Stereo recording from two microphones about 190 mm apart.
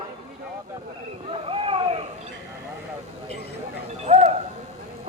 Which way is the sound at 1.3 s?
30° right (ahead or behind).